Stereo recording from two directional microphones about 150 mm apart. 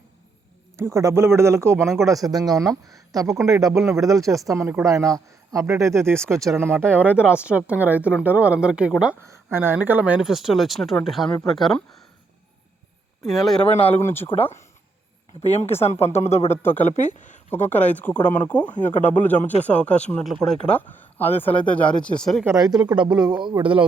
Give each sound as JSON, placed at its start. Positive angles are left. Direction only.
{"t": 0.8, "sound": "a man's voice", "side_deg": -20}
{"t": 9.2, "sound": "speech", "side_deg": -15}
{"t": 13.2, "sound": "speech", "side_deg": 0}
{"t": 14.0, "sound": "speech", "side_deg": 15}
{"t": 15.3, "sound": "speech", "side_deg": 15}
{"t": 15.8, "sound": "speech", "side_deg": 45}
{"t": 16.5, "sound": "speech", "side_deg": 15}
{"t": 16.8, "sound": "speech", "side_deg": 50}
{"t": 17.5, "sound": "speech", "side_deg": 10}
{"t": 22.4, "sound": "a man's voice", "side_deg": -25}